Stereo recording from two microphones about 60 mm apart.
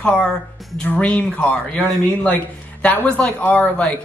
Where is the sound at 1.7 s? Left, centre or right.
Centre.